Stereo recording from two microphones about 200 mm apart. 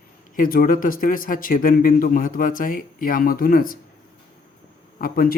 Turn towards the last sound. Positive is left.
turn(degrees=45)  # may be behind; listen again after turning